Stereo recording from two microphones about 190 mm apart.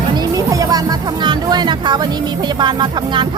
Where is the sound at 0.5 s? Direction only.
20° right (ahead or behind).